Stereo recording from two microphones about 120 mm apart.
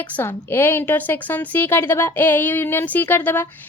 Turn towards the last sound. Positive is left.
turn(degrees=15)  # may be behind; listen again after turning